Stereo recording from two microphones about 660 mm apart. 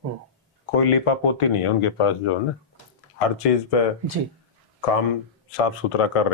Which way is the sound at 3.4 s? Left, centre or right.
Left.